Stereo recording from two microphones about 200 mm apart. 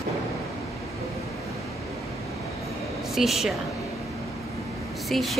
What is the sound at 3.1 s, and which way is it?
Speech, centre (ahead or behind).